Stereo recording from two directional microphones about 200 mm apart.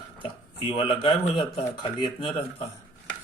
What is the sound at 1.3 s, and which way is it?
A man's voice, 25° left (ahead or behind).